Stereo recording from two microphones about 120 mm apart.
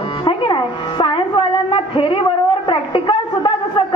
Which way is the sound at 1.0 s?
45° left (ahead or behind).